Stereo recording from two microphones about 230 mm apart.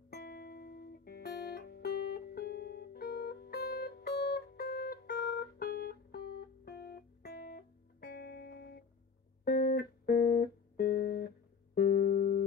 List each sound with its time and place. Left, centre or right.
0.1 s music: left